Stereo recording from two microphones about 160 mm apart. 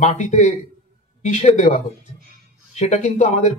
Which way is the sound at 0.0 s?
45° left (ahead or behind).